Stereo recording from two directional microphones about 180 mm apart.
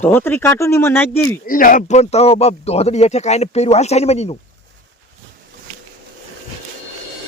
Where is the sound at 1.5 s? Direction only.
50° left (ahead or behind).